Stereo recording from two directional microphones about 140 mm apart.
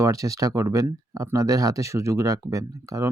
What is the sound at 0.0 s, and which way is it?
Speech, 25° right (ahead or behind).